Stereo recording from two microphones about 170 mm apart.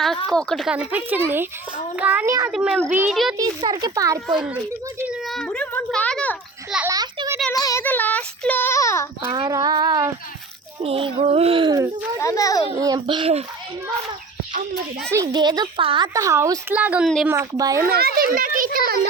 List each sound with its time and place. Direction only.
0.3 s speech: 5° left (ahead or behind); by 2.5 s 15° right (ahead or behind)
2.5 s a child's voice: 5° right (ahead or behind)
3.3 s a woman's voice: 25° right (ahead or behind)
4.3 s a child's voice: 5° right (ahead or behind)
6.9 s a sound: 20° right (ahead or behind)
7.5 s child singing: 20° left (ahead or behind)
9.3 s a woman's voice: 20° right (ahead or behind)
12.2 s a child's voice: 20° left (ahead or behind)
12.7 s a woman's voice: 20° right (ahead or behind)
15.1 s a woman's voice: 20° right (ahead or behind)
16.1 s speech: 15° right (ahead or behind)
17.8 s a child's voice: 65° right (ahead or behind)